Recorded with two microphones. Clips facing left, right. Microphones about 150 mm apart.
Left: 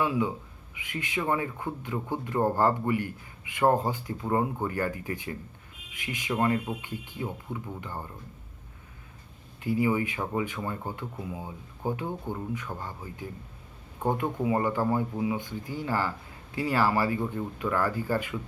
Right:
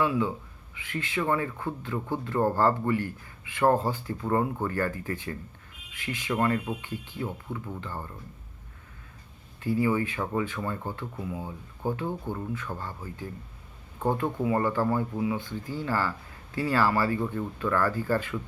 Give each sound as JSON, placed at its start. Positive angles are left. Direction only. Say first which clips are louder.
{"t": 0.0, "sound": "speech", "louder": "right 1 dB", "side_deg": 15}
{"t": 9.6, "sound": "speech", "louder": "even", "side_deg": 15}